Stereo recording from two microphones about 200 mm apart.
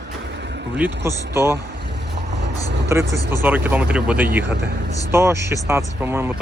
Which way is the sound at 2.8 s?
15° right (ahead or behind).